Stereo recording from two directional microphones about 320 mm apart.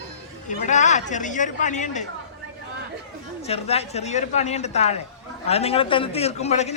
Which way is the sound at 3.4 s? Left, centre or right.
Centre.